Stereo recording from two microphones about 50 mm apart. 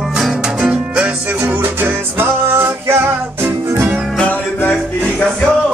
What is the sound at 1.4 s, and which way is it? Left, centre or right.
Music, right.